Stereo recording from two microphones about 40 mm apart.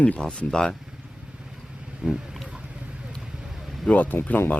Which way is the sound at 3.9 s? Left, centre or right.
Left.